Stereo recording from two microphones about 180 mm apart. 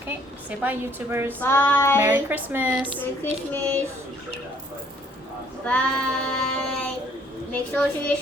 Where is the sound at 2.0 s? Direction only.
10° right (ahead or behind).